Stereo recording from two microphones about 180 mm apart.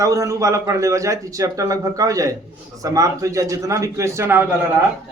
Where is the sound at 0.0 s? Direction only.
15° right (ahead or behind).